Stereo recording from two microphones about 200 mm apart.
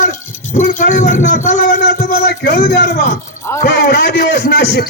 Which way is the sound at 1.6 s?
55° left (ahead or behind).